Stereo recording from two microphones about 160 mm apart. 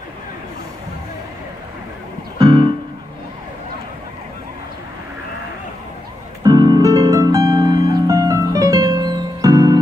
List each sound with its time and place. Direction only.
2.3 s music: 25° right (ahead or behind)
6.4 s music: 25° right (ahead or behind)